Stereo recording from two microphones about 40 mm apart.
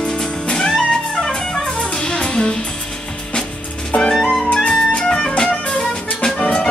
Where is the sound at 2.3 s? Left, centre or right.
Left.